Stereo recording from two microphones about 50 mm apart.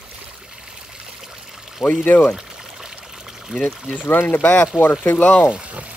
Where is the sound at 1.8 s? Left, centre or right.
Centre.